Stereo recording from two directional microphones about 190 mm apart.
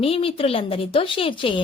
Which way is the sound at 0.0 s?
30° left (ahead or behind).